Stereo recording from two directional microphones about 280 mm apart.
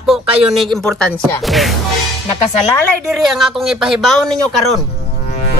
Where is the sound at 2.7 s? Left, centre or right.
Centre.